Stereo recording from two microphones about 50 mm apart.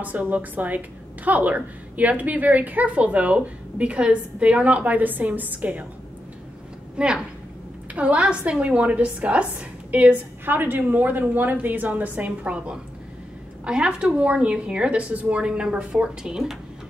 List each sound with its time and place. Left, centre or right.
0.0 s a woman's voice: right
7.0 s speech: centre
10.4 s a woman's voice: right
13.7 s speech: centre